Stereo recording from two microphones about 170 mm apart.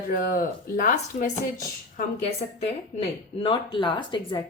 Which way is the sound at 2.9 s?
45° left (ahead or behind).